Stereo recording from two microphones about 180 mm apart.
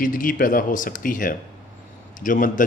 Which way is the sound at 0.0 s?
50° left (ahead or behind).